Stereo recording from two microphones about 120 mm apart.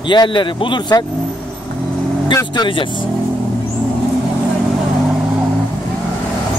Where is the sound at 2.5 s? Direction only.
45° left (ahead or behind).